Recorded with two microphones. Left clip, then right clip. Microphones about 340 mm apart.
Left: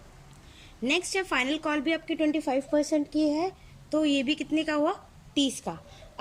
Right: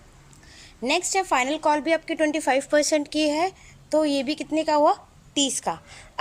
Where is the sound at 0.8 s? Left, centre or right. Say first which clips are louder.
Right 5 dB; centre.